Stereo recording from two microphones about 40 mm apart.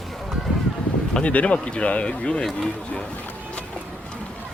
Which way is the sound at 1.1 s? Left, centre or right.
Left.